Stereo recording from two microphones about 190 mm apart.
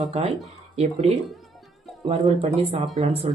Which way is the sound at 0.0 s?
35° right (ahead or behind).